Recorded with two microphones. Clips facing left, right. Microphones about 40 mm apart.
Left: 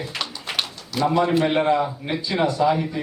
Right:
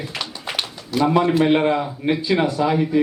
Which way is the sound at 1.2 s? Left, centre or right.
Centre.